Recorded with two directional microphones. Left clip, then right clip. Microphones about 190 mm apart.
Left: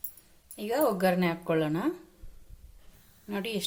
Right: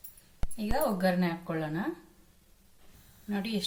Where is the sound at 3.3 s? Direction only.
50° left (ahead or behind).